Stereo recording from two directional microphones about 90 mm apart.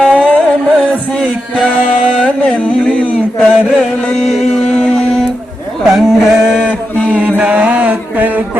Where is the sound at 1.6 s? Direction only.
10° left (ahead or behind); by 6.7 s 10° right (ahead or behind).